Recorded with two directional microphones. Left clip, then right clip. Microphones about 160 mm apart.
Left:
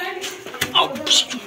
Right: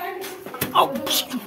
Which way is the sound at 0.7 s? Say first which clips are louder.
Left 2 dB; 45° right (ahead or behind).